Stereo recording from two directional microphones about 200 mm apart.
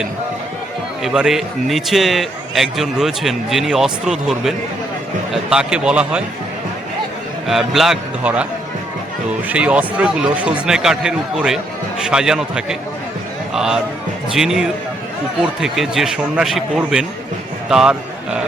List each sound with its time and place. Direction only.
1.0 s a man's voice: 5° right (ahead or behind)
7.4 s a man's voice: centre (ahead or behind)
9.5 s a man's voice: 5° right (ahead or behind)